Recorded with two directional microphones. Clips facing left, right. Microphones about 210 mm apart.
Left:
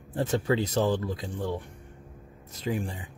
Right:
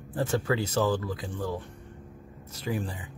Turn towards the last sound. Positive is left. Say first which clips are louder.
# left 1 dB
turn(degrees=20)  # may be behind; listen again after turning